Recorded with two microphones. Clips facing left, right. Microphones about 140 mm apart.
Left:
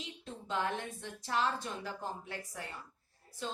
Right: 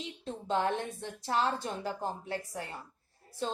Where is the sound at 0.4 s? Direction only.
30° right (ahead or behind).